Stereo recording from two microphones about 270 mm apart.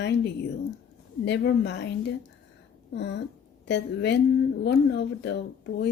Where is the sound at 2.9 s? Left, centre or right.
Left.